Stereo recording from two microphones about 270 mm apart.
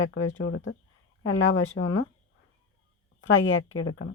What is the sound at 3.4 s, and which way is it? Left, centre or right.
Speech, left.